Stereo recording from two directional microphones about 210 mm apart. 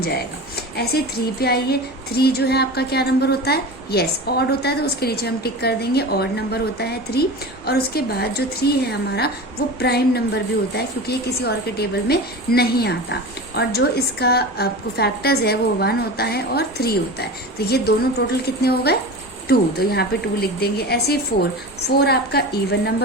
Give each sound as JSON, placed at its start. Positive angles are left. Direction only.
{"t": 0.8, "sound": "a woman's voice", "side_deg": 50}